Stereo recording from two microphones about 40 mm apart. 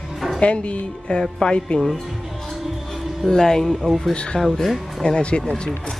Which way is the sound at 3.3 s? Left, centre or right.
Centre.